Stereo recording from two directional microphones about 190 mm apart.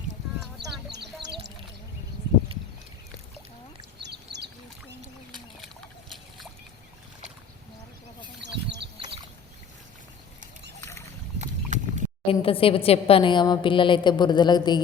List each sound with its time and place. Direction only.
0.9 s music: 65° right (ahead or behind)
4.0 s bird: 60° right (ahead or behind)
8.4 s a sound: 65° right (ahead or behind)
11.3 s boat: 40° right (ahead or behind)
12.3 s a woman's voice: 30° left (ahead or behind)